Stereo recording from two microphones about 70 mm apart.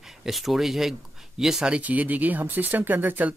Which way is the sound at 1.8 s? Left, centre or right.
Right.